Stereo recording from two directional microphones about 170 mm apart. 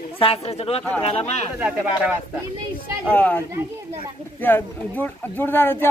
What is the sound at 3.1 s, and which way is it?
Speech, 10° left (ahead or behind).